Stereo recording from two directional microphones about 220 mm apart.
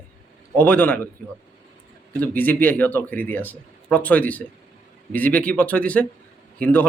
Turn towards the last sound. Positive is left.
turn(degrees=5)  # may be behind; listen again after turning